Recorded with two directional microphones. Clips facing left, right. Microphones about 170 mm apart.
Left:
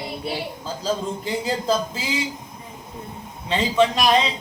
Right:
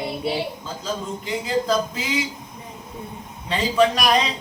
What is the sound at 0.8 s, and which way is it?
Speech, 35° left (ahead or behind).